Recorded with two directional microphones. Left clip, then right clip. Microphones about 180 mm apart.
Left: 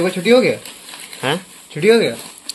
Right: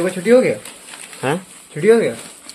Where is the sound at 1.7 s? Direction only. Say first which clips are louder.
Even; 15° left (ahead or behind).